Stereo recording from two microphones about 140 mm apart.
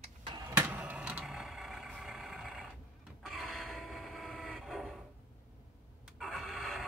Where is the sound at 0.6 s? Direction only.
10° right (ahead or behind).